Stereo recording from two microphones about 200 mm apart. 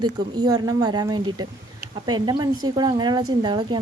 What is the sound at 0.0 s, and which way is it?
Speech, 20° right (ahead or behind).